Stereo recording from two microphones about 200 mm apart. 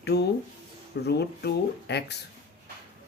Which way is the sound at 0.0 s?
55° left (ahead or behind).